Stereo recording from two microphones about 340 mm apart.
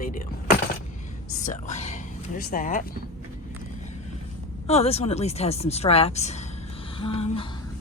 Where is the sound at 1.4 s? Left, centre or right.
Left.